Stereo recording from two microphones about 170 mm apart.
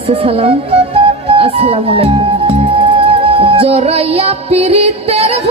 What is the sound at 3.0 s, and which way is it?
Music, 30° right (ahead or behind).